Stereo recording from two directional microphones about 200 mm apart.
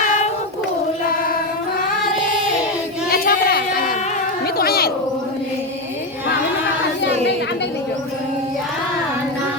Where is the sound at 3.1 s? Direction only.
50° left (ahead or behind).